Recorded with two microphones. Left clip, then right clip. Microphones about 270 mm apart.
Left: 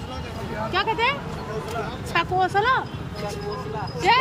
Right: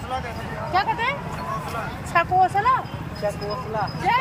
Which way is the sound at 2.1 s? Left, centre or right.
Centre.